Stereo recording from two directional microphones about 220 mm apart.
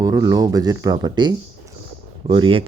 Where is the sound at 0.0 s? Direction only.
15° right (ahead or behind).